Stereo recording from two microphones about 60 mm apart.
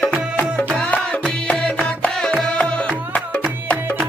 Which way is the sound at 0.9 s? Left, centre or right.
Left.